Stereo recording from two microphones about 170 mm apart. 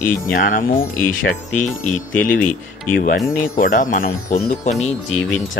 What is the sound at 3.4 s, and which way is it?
Speech, 55° left (ahead or behind).